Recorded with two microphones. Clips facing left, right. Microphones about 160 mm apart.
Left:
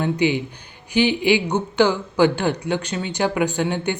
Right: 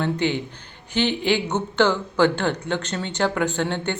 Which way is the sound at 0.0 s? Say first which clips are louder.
Left 3 dB; 10° left (ahead or behind).